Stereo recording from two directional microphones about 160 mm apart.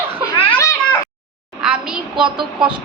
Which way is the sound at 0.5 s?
20° left (ahead or behind).